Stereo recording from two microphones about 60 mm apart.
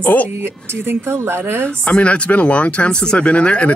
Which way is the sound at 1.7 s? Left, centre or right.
Centre.